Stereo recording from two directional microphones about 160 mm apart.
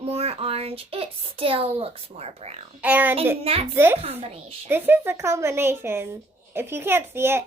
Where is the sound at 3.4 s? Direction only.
35° right (ahead or behind).